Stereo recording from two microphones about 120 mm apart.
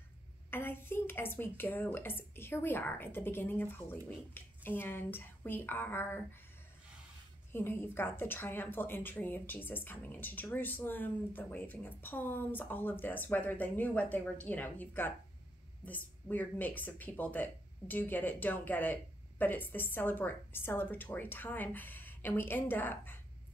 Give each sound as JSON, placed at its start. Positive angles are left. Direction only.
{"t": 0.5, "sound": "a woman's voice", "side_deg": 20}
{"t": 7.5, "sound": "a woman's voice", "side_deg": 15}